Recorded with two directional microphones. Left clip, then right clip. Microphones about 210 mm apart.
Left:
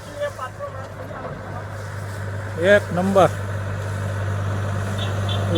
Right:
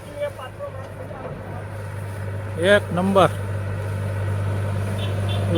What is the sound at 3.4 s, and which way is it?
Vehicle, 20° right (ahead or behind).